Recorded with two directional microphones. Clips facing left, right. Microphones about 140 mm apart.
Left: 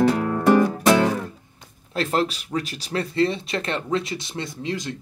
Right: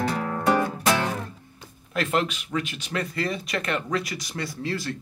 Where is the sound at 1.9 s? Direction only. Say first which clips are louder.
Left 2 dB; 30° left (ahead or behind).